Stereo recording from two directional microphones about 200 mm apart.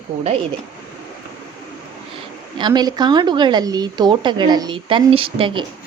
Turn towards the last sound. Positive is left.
turn(degrees=-25)  # may be behind; listen again after turning